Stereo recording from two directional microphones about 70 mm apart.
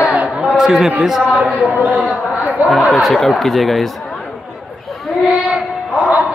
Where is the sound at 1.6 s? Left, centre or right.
Right.